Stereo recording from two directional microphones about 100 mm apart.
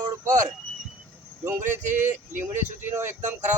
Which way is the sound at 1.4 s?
20° right (ahead or behind).